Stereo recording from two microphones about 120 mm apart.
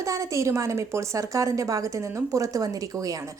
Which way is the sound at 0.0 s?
25° right (ahead or behind).